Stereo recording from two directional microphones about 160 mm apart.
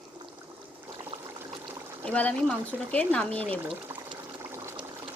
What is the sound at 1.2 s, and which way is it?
Trickle, 20° right (ahead or behind).